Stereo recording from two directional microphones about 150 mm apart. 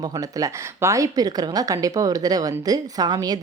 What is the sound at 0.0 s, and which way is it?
A woman's voice, 25° right (ahead or behind).